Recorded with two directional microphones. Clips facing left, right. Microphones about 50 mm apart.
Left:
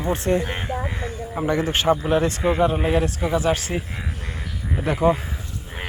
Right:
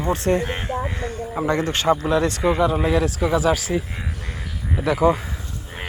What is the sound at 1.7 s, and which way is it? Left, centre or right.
Speech, right.